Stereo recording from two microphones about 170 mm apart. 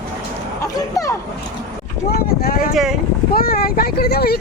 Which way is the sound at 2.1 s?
70° left (ahead or behind).